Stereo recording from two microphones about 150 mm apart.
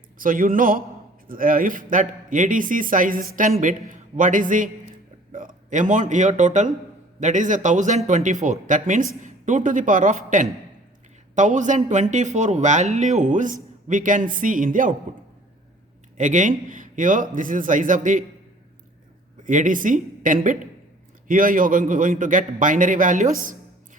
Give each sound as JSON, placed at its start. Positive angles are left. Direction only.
{"t": 0.2, "sound": "a man's voice", "side_deg": -65}
{"t": 16.1, "sound": "speech", "side_deg": -55}
{"t": 19.5, "sound": "speech", "side_deg": -60}